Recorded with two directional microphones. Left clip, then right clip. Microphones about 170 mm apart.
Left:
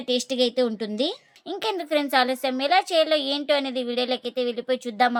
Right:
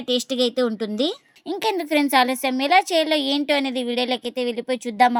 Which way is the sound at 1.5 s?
25° right (ahead or behind).